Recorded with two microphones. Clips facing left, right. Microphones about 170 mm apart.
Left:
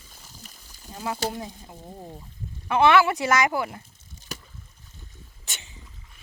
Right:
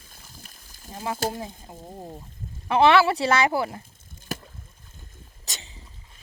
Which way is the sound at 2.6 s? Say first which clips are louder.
Right 1 dB; 30° right (ahead or behind).